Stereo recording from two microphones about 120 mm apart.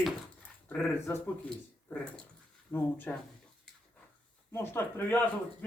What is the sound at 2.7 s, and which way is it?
Speech, 15° left (ahead or behind).